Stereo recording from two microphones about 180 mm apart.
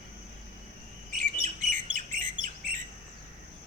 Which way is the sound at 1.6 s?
45° right (ahead or behind).